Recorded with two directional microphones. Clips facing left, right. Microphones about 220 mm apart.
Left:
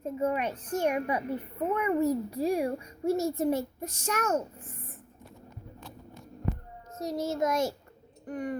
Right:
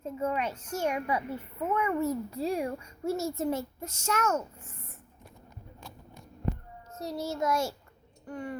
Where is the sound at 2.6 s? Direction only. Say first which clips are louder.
Left 3 dB; 35° left (ahead or behind).